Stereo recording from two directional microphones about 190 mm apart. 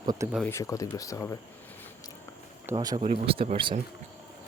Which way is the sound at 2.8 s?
25° right (ahead or behind).